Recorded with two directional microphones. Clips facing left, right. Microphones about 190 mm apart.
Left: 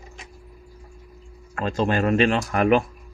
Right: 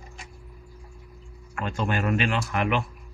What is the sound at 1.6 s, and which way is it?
Speech, 35° left (ahead or behind).